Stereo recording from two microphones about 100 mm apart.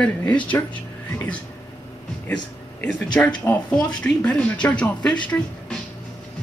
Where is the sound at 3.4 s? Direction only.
15° left (ahead or behind).